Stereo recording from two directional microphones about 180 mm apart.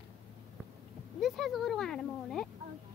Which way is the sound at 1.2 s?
Centre (ahead or behind).